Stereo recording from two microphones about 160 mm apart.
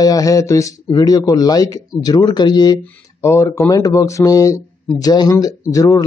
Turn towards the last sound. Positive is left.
turn(degrees=20)  # may be behind; listen again after turning